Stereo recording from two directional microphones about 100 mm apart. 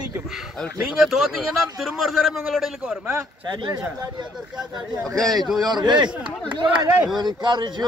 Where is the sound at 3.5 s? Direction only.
50° right (ahead or behind).